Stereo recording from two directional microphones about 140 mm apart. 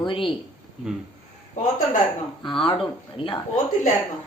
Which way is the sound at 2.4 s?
35° left (ahead or behind).